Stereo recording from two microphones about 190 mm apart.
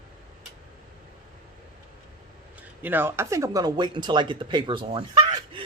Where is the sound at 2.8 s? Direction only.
10° right (ahead or behind).